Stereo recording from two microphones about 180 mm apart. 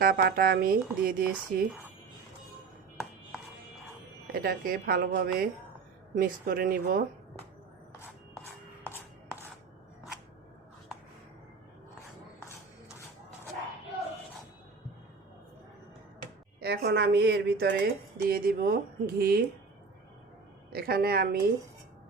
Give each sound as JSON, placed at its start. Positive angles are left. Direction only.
{"t": 0.0, "sound": "a woman's voice", "side_deg": -60}
{"t": 4.3, "sound": "a woman's voice", "side_deg": -55}
{"t": 8.8, "sound": "chopping", "side_deg": 10}
{"t": 16.6, "sound": "a woman's voice", "side_deg": -60}
{"t": 20.7, "sound": "a woman's voice", "side_deg": -55}